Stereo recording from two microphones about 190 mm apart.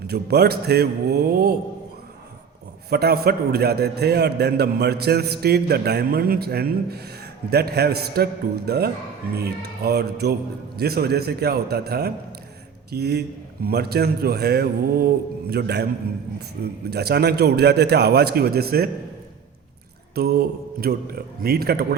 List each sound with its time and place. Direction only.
0.1 s a man's voice: 55° right (ahead or behind)
2.9 s a man's voice: 55° right (ahead or behind)
20.1 s a man's voice: 55° right (ahead or behind)